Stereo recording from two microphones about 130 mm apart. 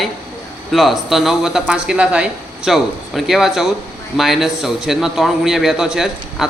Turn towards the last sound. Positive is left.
turn(degrees=-5)  # may be behind; listen again after turning